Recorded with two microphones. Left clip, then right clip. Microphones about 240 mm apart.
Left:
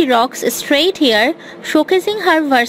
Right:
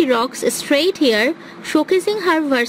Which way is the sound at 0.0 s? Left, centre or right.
Centre.